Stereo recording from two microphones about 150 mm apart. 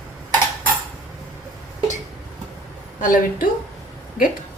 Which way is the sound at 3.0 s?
65° left (ahead or behind).